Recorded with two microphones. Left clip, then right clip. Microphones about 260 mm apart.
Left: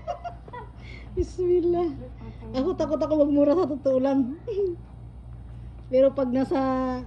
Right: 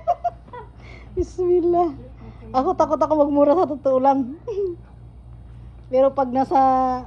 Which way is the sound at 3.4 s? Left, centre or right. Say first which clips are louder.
Right 5 dB; right.